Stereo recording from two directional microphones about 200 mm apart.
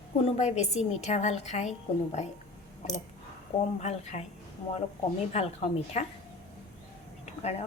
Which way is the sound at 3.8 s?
35° left (ahead or behind).